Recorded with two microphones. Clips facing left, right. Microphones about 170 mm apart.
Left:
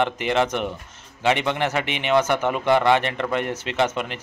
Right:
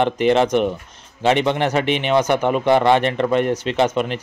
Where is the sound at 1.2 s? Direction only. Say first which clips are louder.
Right 4 dB; 25° right (ahead or behind).